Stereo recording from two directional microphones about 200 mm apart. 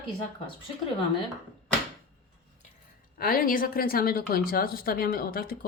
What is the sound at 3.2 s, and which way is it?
Speech, 45° left (ahead or behind).